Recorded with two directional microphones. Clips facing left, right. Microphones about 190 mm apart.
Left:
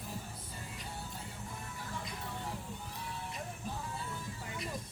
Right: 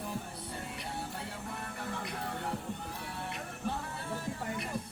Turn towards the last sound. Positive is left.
turn(degrees=-60)  # may be behind; listen again after turning